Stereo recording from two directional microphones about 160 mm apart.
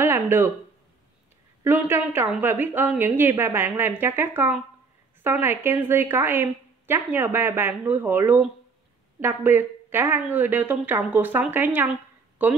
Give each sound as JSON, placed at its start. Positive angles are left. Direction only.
{"t": 0.0, "sound": "speech", "side_deg": -15}
{"t": 1.6, "sound": "a woman's voice", "side_deg": -15}